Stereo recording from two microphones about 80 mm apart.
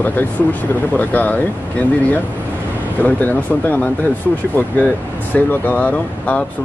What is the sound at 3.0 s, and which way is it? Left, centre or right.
Speech, left.